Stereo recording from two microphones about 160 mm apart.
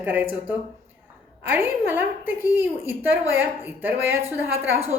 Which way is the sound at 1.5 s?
10° right (ahead or behind).